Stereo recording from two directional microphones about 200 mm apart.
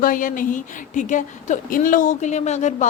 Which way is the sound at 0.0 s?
45° left (ahead or behind).